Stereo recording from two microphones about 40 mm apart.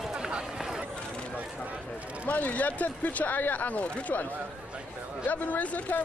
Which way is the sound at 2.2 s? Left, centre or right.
Left.